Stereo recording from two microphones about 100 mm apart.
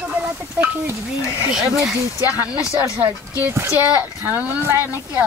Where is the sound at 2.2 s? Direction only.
35° left (ahead or behind).